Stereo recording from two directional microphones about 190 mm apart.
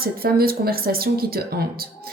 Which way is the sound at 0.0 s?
50° right (ahead or behind).